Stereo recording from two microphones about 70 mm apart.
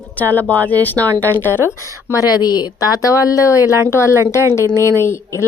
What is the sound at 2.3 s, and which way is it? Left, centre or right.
A woman's voice, left.